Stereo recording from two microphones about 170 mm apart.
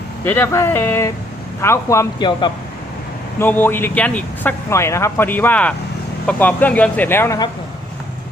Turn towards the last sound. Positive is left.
turn(degrees=15)  # may be behind; listen again after turning